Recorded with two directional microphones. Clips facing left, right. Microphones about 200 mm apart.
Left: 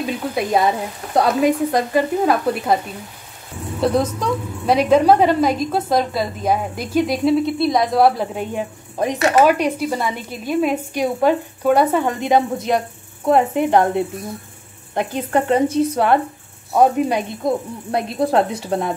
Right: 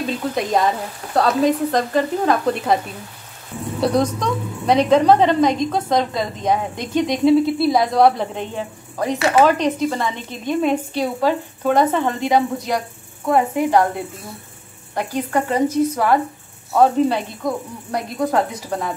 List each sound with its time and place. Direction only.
0.0 s speech: 5° left (ahead or behind)
3.8 s a woman's voice: 5° left (ahead or behind)
8.5 s speech: 20° left (ahead or behind)
11.0 s a woman's voice: 15° left (ahead or behind)
16.7 s a woman's voice: 15° left (ahead or behind)